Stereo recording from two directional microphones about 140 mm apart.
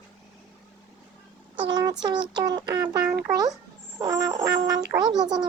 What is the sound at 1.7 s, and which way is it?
Speech, 30° right (ahead or behind).